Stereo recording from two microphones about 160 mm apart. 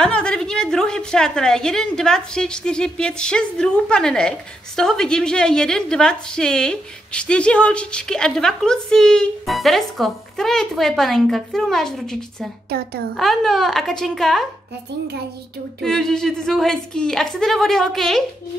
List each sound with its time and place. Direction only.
0.0 s a woman's voice: 5° left (ahead or behind)
12.6 s a child's voice: 75° right (ahead or behind)
13.1 s a woman's voice: centre (ahead or behind)
15.8 s a woman's voice: 5° left (ahead or behind)